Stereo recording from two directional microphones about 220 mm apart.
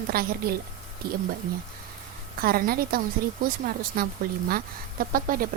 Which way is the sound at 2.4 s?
40° right (ahead or behind).